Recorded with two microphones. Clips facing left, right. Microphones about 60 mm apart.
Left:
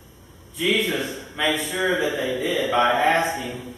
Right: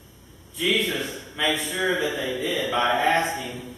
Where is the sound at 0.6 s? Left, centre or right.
Centre.